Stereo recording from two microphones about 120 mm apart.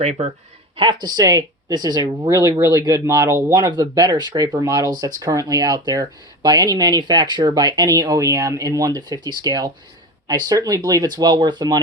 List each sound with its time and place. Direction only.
0.0 s speech: 65° right (ahead or behind)
0.8 s speech: 35° right (ahead or behind)